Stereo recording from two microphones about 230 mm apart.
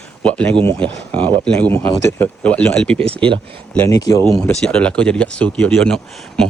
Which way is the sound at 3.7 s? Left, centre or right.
Centre.